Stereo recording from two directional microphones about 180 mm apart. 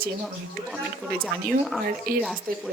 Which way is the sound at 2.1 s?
55° right (ahead or behind).